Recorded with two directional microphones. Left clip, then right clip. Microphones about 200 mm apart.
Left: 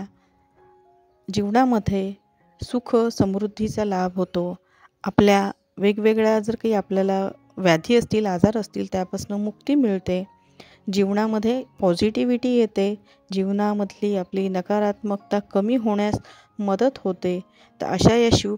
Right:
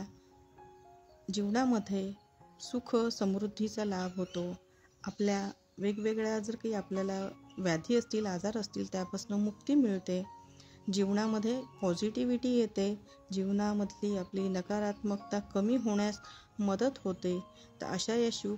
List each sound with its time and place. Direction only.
1.2 s a woman's voice: 40° left (ahead or behind)